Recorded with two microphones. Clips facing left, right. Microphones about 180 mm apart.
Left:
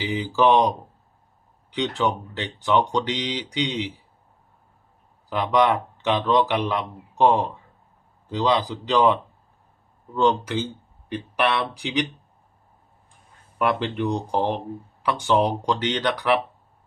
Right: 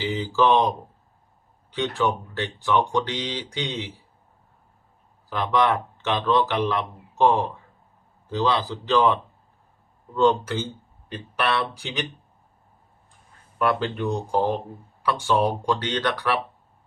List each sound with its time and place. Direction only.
0.0 s speech: 15° left (ahead or behind)
1.7 s speech: 20° left (ahead or behind)
5.3 s speech: 15° left (ahead or behind)
10.2 s speech: 15° left (ahead or behind)
13.6 s speech: 15° left (ahead or behind)